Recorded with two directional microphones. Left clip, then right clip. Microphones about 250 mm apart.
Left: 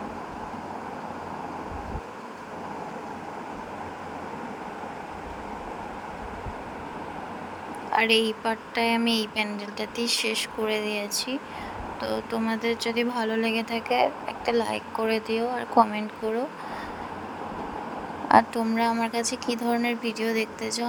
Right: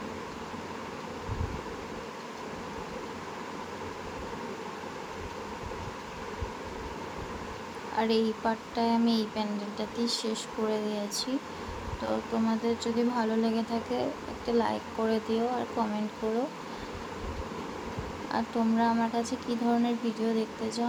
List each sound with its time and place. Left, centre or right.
7.9 s speech: left
18.3 s speech: left